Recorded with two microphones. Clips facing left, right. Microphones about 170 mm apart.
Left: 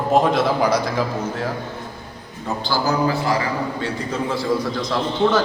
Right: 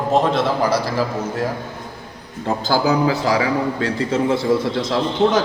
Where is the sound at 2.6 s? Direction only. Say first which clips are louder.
Right 4 dB; 50° right (ahead or behind).